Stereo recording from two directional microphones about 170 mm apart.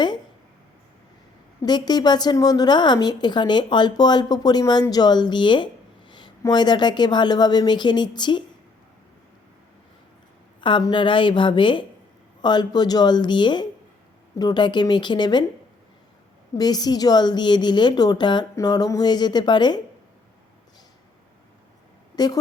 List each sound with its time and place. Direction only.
1.6 s a woman's voice: 25° left (ahead or behind)
10.6 s a woman's voice: 25° left (ahead or behind)
16.6 s a woman's voice: 25° left (ahead or behind)
22.1 s speech: 25° left (ahead or behind)